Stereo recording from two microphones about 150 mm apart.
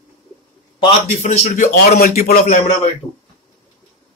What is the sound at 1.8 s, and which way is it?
Speech, 85° left.